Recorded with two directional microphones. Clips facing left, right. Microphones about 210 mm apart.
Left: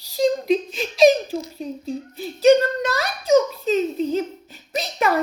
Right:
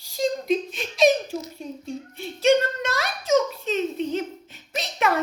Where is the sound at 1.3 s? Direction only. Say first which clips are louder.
Left 4 dB; 30° left (ahead or behind).